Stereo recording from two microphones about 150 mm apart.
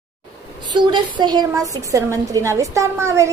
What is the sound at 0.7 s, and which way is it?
A woman's voice, 30° right (ahead or behind).